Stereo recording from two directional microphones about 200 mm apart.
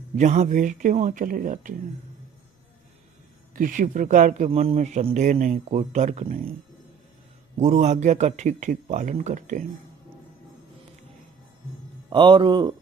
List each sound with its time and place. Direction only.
0.2 s speech: 35° right (ahead or behind)
3.5 s speech: 40° right (ahead or behind)
7.6 s speech: 35° right (ahead or behind)
12.1 s speech: 25° right (ahead or behind)